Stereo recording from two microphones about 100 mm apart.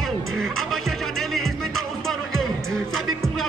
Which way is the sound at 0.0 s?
Centre (ahead or behind).